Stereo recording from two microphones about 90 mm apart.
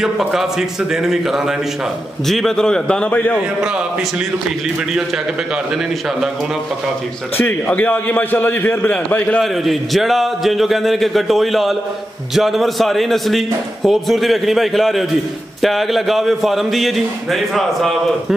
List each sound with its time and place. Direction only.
0.0 s a man's voice: 5° right (ahead or behind)
3.3 s a man's voice: 10° right (ahead or behind)
7.3 s a man's voice: 20° left (ahead or behind)
9.4 s a man's voice: centre (ahead or behind)